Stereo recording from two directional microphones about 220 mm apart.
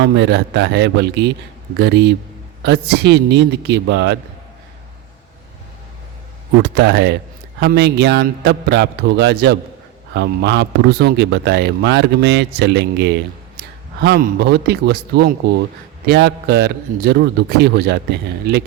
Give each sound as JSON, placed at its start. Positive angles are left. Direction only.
{"t": 0.0, "sound": "a man's voice", "side_deg": -50}
{"t": 6.6, "sound": "a man's voice", "side_deg": -50}